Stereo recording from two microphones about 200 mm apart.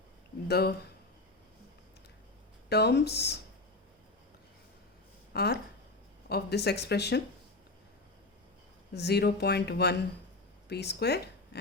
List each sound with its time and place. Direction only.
0.4 s speech: 50° left (ahead or behind)
2.6 s speech: 55° left (ahead or behind)
5.3 s speech: 55° left (ahead or behind)
8.9 s speech: 55° left (ahead or behind)